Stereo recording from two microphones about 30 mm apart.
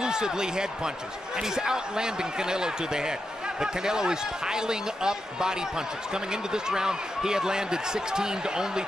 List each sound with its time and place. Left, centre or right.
0.0 s speech: right